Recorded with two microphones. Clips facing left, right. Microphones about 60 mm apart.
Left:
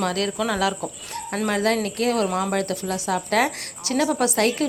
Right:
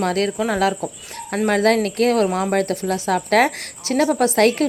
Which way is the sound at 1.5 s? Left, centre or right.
Right.